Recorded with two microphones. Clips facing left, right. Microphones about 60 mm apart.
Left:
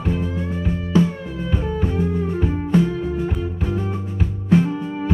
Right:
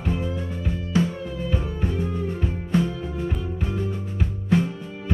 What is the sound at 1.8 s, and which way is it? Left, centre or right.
Music, left.